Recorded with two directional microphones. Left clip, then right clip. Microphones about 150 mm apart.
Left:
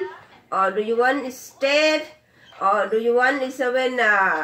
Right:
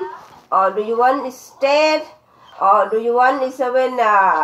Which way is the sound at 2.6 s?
35° left (ahead or behind).